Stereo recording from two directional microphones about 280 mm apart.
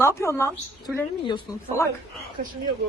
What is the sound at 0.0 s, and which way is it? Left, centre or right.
Speech, centre.